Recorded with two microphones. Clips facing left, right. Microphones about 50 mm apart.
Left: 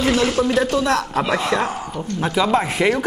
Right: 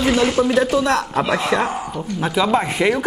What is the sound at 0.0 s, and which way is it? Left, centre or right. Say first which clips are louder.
Speech: right 1 dB; centre.